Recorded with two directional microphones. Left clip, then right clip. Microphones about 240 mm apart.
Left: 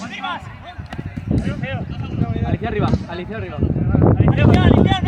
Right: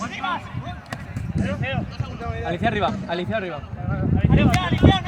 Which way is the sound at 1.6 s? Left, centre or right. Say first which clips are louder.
Even; centre.